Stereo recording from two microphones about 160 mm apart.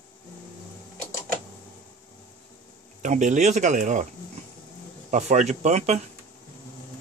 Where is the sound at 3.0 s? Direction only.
50° right (ahead or behind).